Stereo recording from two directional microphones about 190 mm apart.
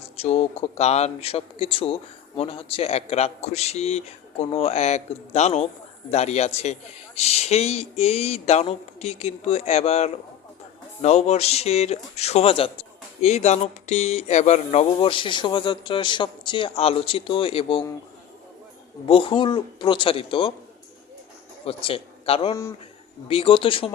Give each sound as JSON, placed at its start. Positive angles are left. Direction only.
{"t": 0.2, "sound": "speech", "side_deg": 35}
{"t": 19.0, "sound": "speech", "side_deg": 30}
{"t": 21.6, "sound": "speech", "side_deg": 30}